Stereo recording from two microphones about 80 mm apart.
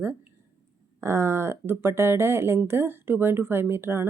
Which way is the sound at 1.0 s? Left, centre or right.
Right.